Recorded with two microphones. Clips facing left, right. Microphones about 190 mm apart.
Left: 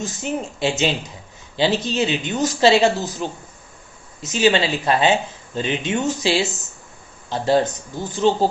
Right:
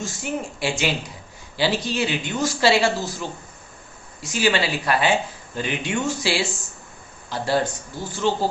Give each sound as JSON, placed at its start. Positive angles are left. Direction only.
{"t": 0.0, "sound": "a woman's voice", "side_deg": 20}